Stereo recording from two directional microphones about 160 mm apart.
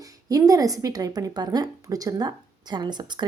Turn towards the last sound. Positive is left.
turn(degrees=-25)  # may be behind; listen again after turning